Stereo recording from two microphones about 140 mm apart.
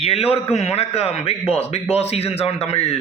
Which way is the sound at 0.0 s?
45° left (ahead or behind).